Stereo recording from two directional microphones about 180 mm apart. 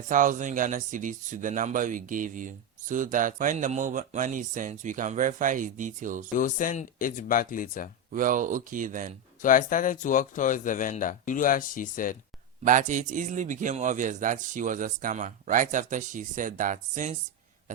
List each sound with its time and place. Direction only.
0.1 s a man's voice: 45° right (ahead or behind)
6.3 s speech: 50° left (ahead or behind)
8.1 s a man's voice: 45° right (ahead or behind)
9.4 s speech: 50° left (ahead or behind)
12.6 s a man's voice: 45° right (ahead or behind)